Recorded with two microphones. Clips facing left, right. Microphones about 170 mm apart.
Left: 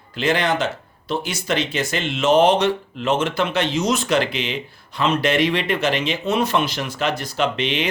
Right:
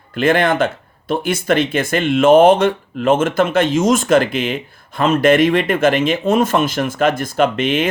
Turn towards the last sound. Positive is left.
turn(degrees=-50)  # may be behind; listen again after turning